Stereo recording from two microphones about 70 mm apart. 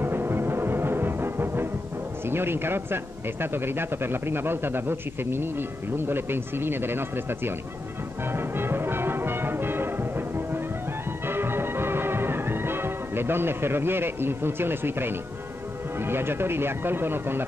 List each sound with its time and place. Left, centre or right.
0.0 s music: right
2.2 s speech: right
8.3 s music: right
16.0 s speech: right